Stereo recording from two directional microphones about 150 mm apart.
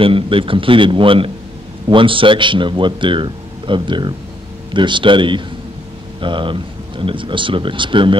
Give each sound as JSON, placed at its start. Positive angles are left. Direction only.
{"t": 0.0, "sound": "speech", "side_deg": -35}